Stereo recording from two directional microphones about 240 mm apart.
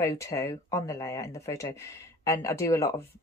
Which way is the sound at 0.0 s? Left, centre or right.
Centre.